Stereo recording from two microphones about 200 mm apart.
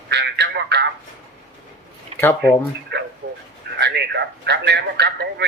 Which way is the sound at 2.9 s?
55° right (ahead or behind).